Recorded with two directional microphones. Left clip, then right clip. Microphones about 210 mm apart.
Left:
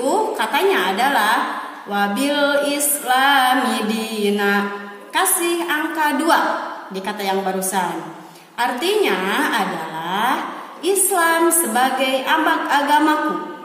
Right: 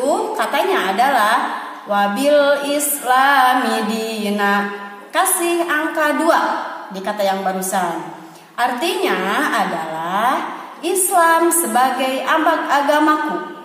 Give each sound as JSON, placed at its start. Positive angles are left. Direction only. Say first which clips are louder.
{"t": 0.0, "sound": "a woman's voice", "louder": "right 1 dB", "side_deg": -10}
{"t": 1.9, "sound": "music", "louder": "right 5 dB", "side_deg": -10}
{"t": 10.0, "sound": "a sound", "louder": "right 2 dB", "side_deg": -10}
{"t": 11.1, "sound": "music", "louder": "right 5 dB", "side_deg": -10}